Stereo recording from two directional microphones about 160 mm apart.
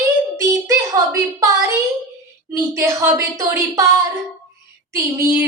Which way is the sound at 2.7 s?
20° right (ahead or behind).